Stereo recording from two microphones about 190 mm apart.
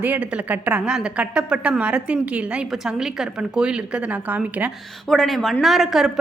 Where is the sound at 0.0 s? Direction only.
5° right (ahead or behind).